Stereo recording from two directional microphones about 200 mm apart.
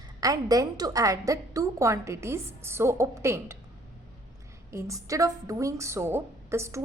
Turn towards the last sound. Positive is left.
turn(degrees=-15)  # may be behind; listen again after turning